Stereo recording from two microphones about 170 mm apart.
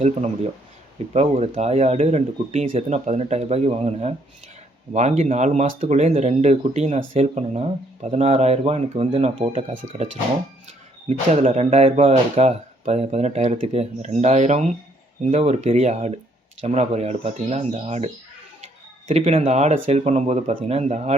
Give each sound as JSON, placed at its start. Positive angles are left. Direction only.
{"t": 1.1, "sound": "speech", "side_deg": -40}
{"t": 11.3, "sound": "speech", "side_deg": -40}